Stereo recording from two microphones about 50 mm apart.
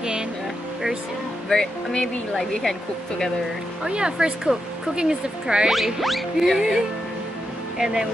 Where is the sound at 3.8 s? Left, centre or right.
Centre.